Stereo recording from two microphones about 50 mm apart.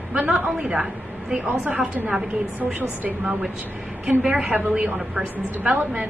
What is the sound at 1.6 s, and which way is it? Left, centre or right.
A woman's voice, right.